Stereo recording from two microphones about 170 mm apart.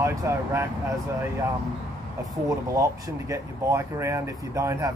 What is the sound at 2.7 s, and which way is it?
Speech, 20° right (ahead or behind).